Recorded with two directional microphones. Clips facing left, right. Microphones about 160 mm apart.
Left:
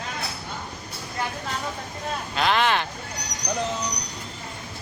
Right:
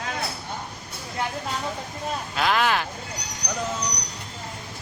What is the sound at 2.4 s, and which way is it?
Speech, 5° right (ahead or behind).